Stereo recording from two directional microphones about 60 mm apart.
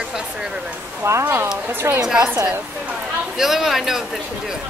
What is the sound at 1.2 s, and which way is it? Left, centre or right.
Speech, right.